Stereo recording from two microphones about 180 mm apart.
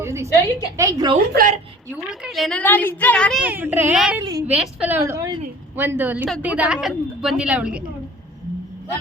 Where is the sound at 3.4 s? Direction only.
10° right (ahead or behind).